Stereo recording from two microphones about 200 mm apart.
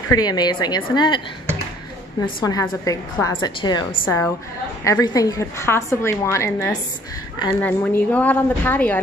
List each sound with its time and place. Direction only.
0.1 s a woman's voice: 20° left (ahead or behind)
2.4 s a woman's voice: 15° left (ahead or behind)